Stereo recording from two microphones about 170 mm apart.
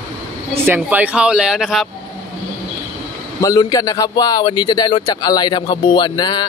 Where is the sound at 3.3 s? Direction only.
20° left (ahead or behind).